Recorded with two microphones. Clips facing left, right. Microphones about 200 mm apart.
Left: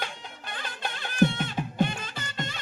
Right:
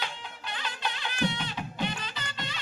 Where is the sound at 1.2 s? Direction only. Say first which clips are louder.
Left 7 dB; 50° left (ahead or behind).